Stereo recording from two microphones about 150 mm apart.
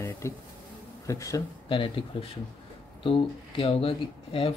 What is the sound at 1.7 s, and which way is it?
Speech, 35° left (ahead or behind).